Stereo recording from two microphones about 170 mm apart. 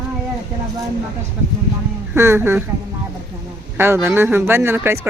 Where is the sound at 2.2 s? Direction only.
15° right (ahead or behind).